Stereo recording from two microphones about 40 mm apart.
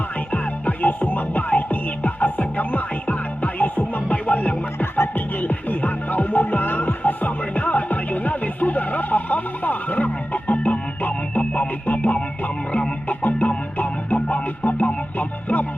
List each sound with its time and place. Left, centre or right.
0.3 s music: left